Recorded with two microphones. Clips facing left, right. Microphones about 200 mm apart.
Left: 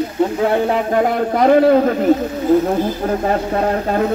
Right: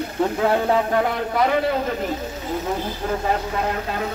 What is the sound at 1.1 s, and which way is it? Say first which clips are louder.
Speech: left 8 dB; 50° left (ahead or behind).